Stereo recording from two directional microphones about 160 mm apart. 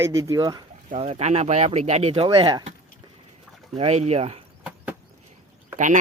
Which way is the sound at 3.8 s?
40° right (ahead or behind).